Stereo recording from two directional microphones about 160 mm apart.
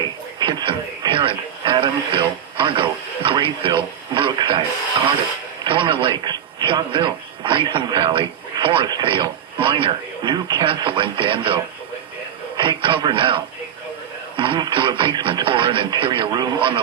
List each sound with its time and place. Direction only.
0.3 s speech: 30° right (ahead or behind)